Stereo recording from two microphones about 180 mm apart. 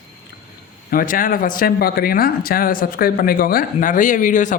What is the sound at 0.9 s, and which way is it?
A woman's voice, 50° left (ahead or behind).